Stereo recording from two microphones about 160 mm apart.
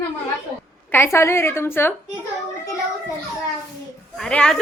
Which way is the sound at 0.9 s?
15° left (ahead or behind).